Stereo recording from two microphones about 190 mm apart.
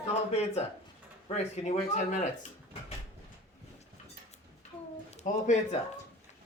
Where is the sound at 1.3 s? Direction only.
35° left (ahead or behind).